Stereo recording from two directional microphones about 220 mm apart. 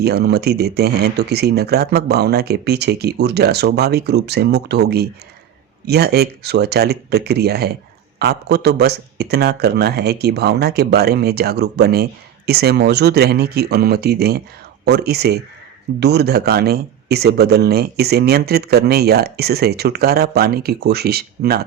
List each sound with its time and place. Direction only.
0.0 s speech: 45° right (ahead or behind)